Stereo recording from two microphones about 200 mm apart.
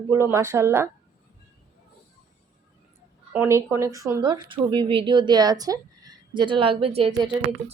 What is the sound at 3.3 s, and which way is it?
A woman's voice, 10° right (ahead or behind).